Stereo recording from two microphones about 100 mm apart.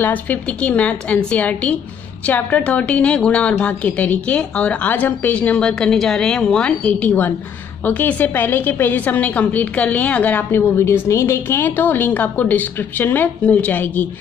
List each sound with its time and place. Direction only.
0.0 s a woman's voice: 15° left (ahead or behind)